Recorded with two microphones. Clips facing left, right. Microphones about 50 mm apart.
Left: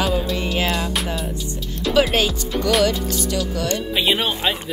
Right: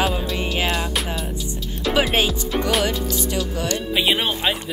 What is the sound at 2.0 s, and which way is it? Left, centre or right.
Speech, right.